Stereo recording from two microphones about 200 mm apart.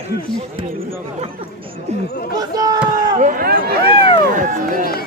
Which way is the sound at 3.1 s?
45° right (ahead or behind).